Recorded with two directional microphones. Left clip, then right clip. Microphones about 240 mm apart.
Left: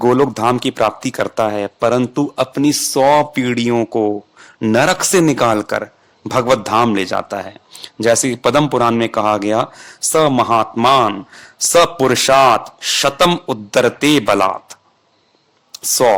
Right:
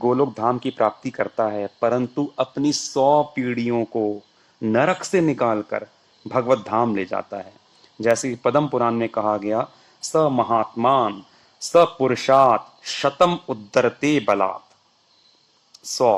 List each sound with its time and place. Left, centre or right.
0.0 s speech: left
15.8 s speech: left